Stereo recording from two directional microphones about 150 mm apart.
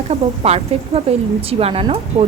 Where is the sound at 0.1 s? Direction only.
45° right (ahead or behind).